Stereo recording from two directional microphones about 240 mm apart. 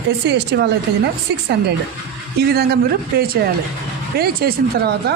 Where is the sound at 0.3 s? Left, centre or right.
Right.